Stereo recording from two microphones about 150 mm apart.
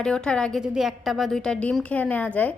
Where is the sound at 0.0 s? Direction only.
5° left (ahead or behind).